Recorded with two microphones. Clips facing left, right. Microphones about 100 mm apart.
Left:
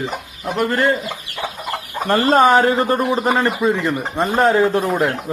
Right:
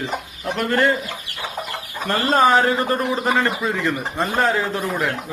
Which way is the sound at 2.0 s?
35° left (ahead or behind).